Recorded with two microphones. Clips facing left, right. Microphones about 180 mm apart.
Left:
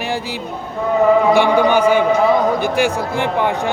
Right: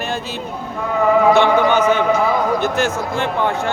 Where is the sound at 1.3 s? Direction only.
15° left (ahead or behind).